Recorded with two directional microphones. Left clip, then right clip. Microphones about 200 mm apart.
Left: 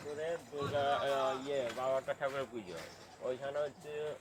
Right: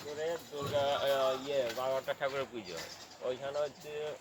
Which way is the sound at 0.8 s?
35° right (ahead or behind).